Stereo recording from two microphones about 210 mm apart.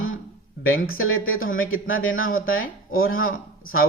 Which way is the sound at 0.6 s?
75° left (ahead or behind).